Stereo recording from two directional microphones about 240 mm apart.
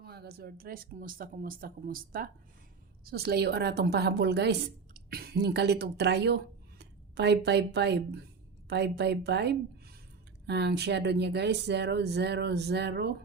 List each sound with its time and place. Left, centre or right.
0.0 s speech: right